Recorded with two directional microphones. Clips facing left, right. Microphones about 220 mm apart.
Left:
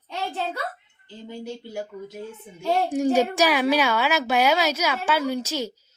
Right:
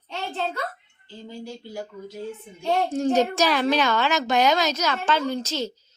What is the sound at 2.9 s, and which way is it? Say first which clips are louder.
A woman's voice: left 1 dB; 10° left (ahead or behind).